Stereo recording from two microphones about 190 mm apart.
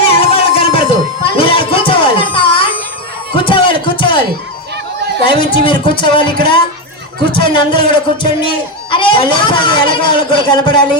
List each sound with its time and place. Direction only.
0.0 s a sound: 30° left (ahead or behind)
3.3 s music: 25° left (ahead or behind)
5.2 s a man's voice: 25° left (ahead or behind)